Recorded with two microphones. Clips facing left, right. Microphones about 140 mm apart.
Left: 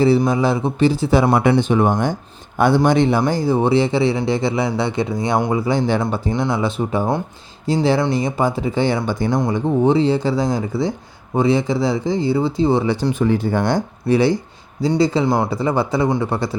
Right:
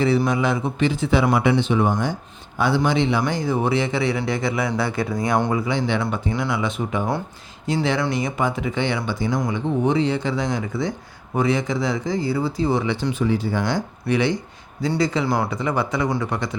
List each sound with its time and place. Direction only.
0.3 s a man's voice: 30° left (ahead or behind)
5.6 s speech: 40° left (ahead or behind)
9.4 s speech: 35° left (ahead or behind); by 13.8 s 50° left (ahead or behind)
14.1 s a man's voice: 35° left (ahead or behind)